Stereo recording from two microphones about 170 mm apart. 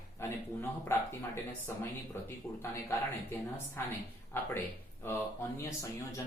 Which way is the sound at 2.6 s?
15° left (ahead or behind).